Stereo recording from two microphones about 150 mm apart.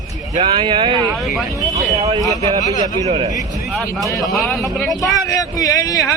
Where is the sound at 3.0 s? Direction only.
45° right (ahead or behind).